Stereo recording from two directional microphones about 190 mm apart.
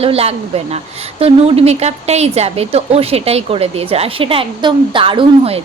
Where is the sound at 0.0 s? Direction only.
30° right (ahead or behind).